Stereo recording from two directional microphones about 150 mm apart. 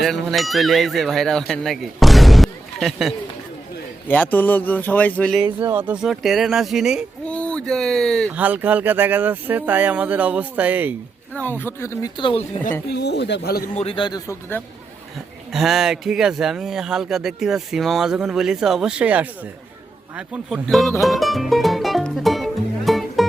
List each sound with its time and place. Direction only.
0.0 s speech: centre (ahead or behind)
4.1 s speech: 10° left (ahead or behind)
5.6 s speech: 15° right (ahead or behind)
6.0 s speech: centre (ahead or behind)
7.3 s speech: 5° left (ahead or behind)
8.3 s speech: 10° right (ahead or behind)
11.3 s speech: 15° left (ahead or behind)
12.1 s a man's voice: 35° left (ahead or behind)
12.9 s speech: 90° left
13.7 s a man's voice: 35° left (ahead or behind)
15.5 s speech: centre (ahead or behind)
21.0 s music: centre (ahead or behind)